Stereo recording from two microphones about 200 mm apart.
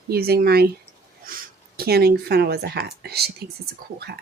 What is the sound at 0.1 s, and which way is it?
Speech, 50° right (ahead or behind).